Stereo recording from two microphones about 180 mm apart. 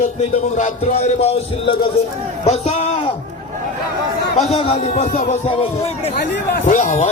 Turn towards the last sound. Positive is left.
turn(degrees=40)  # may be behind; listen again after turning